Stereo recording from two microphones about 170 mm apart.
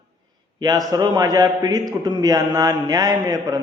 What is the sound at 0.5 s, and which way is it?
A man's voice, 20° right (ahead or behind).